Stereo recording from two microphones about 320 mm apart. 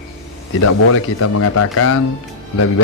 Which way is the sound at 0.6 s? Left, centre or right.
Left.